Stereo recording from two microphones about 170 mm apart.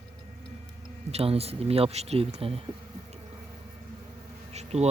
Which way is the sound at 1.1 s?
35° right (ahead or behind).